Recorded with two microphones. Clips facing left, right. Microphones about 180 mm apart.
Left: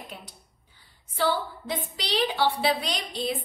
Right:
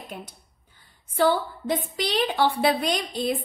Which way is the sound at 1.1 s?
50° right (ahead or behind).